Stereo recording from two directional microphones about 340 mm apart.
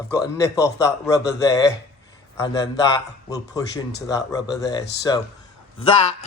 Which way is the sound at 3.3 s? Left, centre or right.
Centre.